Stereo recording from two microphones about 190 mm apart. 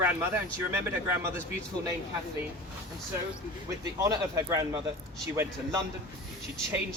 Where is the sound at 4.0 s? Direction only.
20° right (ahead or behind).